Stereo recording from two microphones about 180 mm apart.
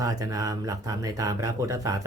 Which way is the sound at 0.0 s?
20° right (ahead or behind).